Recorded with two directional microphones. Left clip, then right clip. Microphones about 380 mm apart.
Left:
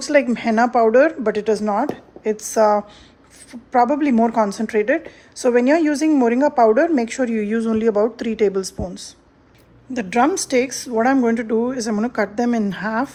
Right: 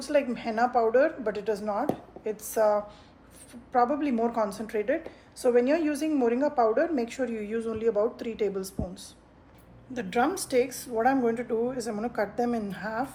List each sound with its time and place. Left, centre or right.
0.0 s a woman's voice: left